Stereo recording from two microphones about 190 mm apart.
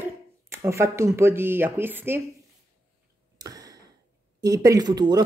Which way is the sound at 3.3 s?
20° right (ahead or behind).